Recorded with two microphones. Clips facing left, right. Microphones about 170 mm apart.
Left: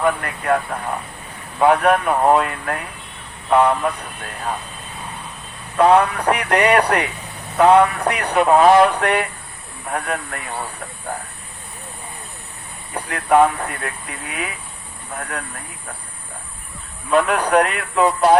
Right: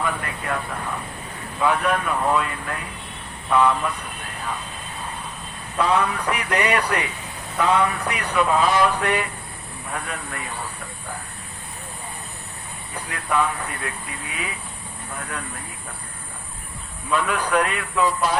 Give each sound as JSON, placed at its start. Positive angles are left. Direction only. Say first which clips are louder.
{"t": 0.0, "sound": "speech", "louder": "left 6 dB", "side_deg": 65}
{"t": 5.7, "sound": "speech", "louder": "left 7 dB", "side_deg": 65}
{"t": 12.9, "sound": "speech", "louder": "left 9 dB", "side_deg": 65}
{"t": 15.2, "sound": "speech", "louder": "left 4 dB", "side_deg": 60}
{"t": 17.1, "sound": "speech", "louder": "left 6 dB", "side_deg": 60}